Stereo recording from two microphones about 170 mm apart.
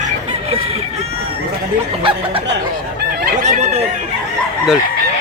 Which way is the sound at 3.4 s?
40° right (ahead or behind).